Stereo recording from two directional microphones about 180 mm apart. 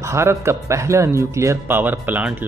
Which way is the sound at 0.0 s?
15° right (ahead or behind).